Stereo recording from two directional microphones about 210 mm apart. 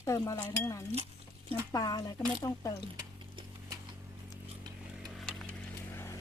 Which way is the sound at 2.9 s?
20° right (ahead or behind).